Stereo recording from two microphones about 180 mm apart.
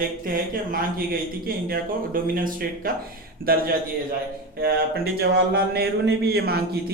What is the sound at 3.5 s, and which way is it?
A man's voice, 55° right (ahead or behind).